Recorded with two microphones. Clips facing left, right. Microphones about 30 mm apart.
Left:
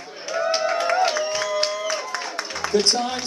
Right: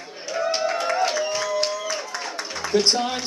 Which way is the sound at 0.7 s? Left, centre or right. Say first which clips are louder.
Left 2 dB; left.